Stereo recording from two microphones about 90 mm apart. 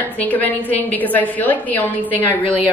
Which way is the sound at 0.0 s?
20° left (ahead or behind).